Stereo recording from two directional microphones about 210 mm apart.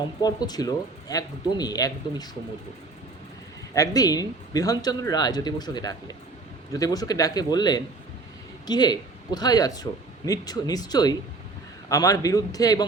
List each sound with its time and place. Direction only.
0.2 s a man's voice: 20° left (ahead or behind)
3.8 s a man's voice: 15° left (ahead or behind)